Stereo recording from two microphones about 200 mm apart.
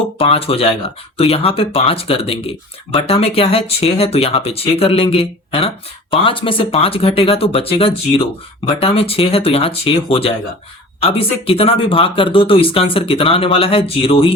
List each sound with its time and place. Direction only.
0.2 s speech: 30° left (ahead or behind)